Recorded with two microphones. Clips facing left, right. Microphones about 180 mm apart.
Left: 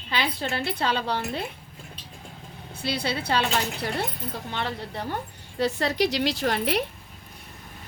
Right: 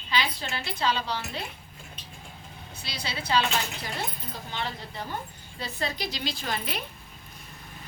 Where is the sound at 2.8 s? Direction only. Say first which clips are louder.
Left 6 dB; 60° left (ahead or behind).